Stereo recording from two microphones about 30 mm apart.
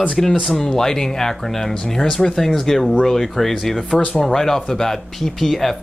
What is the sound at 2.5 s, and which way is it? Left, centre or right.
Speech, centre.